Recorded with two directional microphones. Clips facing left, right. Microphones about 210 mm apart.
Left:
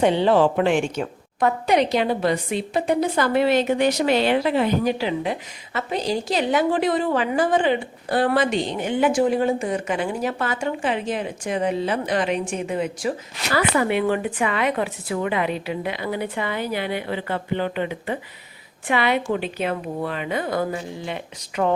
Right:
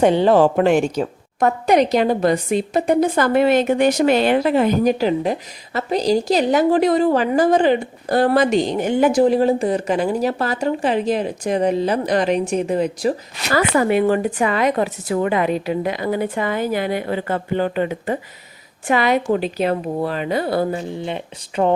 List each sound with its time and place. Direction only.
0.0 s a woman's voice: 45° right (ahead or behind); by 21.7 s 25° right (ahead or behind)